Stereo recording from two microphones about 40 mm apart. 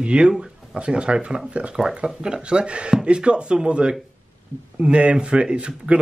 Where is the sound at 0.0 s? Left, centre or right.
Right.